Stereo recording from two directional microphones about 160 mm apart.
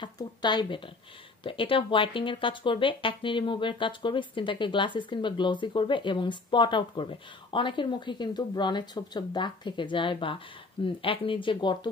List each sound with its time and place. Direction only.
0.0 s speech: 30° left (ahead or behind)